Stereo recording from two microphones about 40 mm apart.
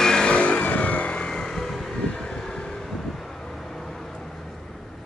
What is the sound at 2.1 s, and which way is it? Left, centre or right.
Vehicle, centre.